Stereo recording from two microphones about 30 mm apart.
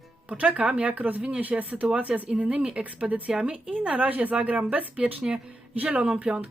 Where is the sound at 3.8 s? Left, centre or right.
Right.